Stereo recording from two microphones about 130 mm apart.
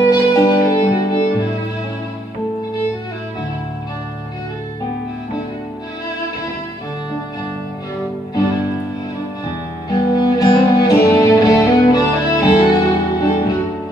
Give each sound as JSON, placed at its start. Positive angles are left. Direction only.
{"t": 0.0, "sound": "music", "side_deg": 25}
{"t": 9.8, "sound": "music", "side_deg": 25}